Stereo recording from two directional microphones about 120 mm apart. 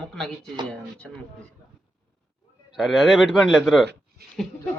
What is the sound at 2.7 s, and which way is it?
Speech, 5° right (ahead or behind).